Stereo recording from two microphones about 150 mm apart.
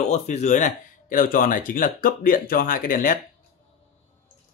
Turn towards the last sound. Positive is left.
turn(degrees=70)  # may be behind; listen again after turning